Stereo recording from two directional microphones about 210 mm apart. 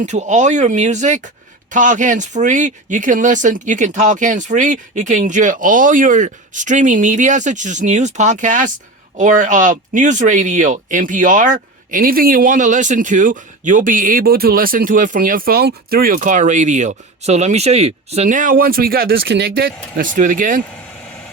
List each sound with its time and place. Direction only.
0.0 s speech: 35° right (ahead or behind)